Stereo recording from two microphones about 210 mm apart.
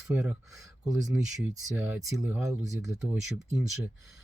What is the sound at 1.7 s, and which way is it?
Speech, 10° right (ahead or behind).